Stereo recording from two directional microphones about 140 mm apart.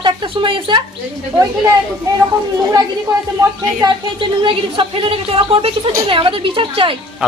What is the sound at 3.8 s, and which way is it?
Speech, 35° right (ahead or behind).